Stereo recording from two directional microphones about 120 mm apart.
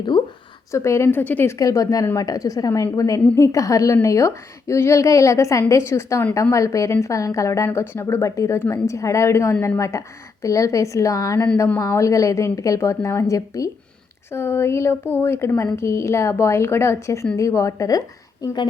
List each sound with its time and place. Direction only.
0.1 s speech: 35° left (ahead or behind)
0.7 s a woman's voice: 25° left (ahead or behind)
1.5 s a woman's voice: 30° left (ahead or behind)
18.4 s speech: 40° left (ahead or behind)